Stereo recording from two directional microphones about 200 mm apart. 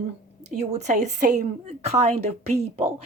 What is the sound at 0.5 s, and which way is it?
A woman's voice, 35° right (ahead or behind).